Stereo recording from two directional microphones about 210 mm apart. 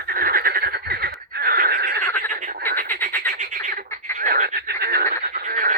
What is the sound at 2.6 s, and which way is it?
Frog, 10° left (ahead or behind).